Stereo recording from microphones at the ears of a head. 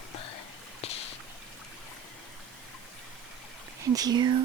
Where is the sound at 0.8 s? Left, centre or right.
Left.